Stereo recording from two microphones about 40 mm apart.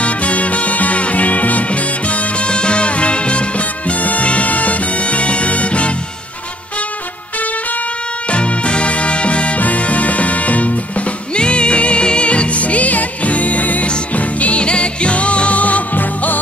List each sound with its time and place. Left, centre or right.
0.0 s music: left
8.3 s music: left
11.3 s music: left